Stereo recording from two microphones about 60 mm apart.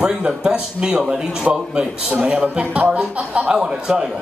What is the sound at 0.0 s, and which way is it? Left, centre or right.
A man's voice, centre.